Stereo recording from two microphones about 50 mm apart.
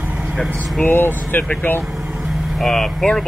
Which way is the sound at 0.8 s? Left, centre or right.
Left.